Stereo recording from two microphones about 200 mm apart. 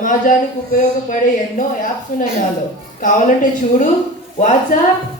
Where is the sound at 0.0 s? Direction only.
40° left (ahead or behind).